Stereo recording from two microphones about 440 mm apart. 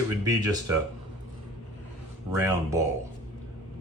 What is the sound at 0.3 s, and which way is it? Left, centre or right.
Speech, centre.